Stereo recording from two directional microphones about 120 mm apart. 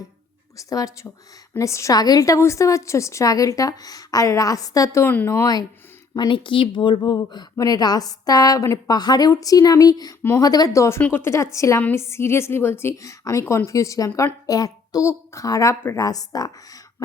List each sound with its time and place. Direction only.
0.5 s a woman's voice: 30° left (ahead or behind)
6.1 s a woman's voice: 40° left (ahead or behind)